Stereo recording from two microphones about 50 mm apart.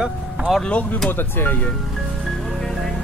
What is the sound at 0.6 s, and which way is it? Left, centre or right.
Speech, left.